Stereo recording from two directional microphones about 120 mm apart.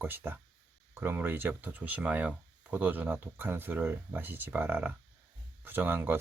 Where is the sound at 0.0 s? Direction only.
15° right (ahead or behind).